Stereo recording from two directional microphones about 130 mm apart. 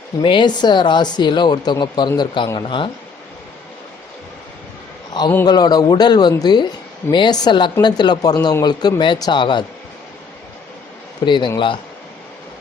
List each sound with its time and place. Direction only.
0.2 s speech: 40° left (ahead or behind)
5.2 s speech: 35° left (ahead or behind)
11.3 s speech: 35° left (ahead or behind)